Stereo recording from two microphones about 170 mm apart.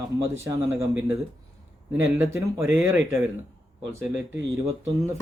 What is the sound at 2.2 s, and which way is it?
Speech, 15° right (ahead or behind).